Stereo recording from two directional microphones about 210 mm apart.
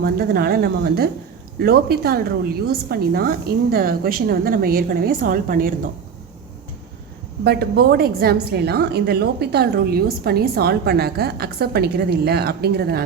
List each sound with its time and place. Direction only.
0.0 s a woman's voice: 45° right (ahead or behind)
7.4 s a woman's voice: 50° right (ahead or behind)